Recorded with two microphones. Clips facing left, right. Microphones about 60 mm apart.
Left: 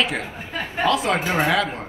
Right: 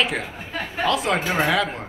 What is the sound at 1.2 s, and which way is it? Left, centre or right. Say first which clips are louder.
Speech: left 1 dB; left.